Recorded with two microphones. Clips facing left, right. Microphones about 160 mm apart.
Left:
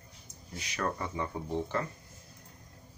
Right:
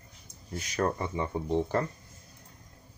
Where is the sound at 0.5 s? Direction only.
40° right (ahead or behind).